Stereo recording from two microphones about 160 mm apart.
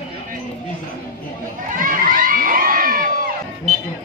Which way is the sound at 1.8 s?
60° right (ahead or behind).